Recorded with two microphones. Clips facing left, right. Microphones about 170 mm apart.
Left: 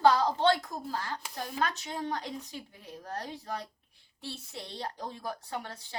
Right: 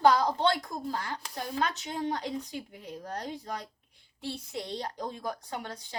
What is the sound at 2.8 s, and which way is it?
A woman's voice, 15° right (ahead or behind).